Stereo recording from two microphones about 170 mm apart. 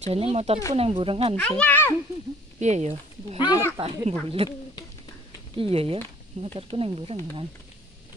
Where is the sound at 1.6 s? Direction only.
10° left (ahead or behind).